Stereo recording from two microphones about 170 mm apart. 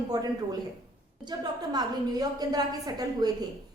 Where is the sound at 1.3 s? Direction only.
25° right (ahead or behind).